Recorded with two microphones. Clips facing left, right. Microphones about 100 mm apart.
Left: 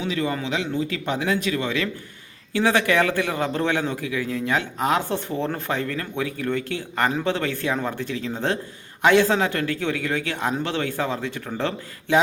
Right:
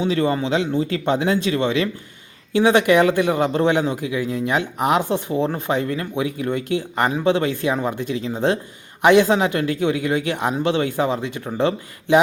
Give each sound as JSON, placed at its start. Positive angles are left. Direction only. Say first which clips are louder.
{"t": 0.0, "sound": "a man's voice", "louder": "right 6 dB", "side_deg": -35}